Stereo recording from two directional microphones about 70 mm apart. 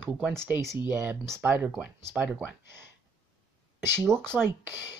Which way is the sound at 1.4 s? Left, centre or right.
Right.